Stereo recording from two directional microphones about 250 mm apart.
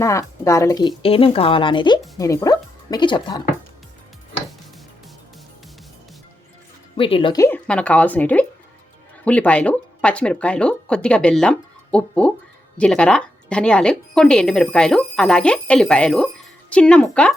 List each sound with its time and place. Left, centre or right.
0.0 s speech: centre
6.9 s speech: left; by 17.3 s centre